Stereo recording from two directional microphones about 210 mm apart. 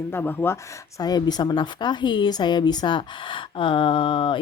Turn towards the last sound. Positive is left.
turn(degrees=25)  # may be behind; listen again after turning